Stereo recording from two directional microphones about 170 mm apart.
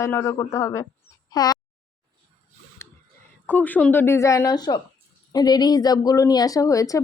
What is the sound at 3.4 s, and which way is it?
A woman's voice, 10° left (ahead or behind).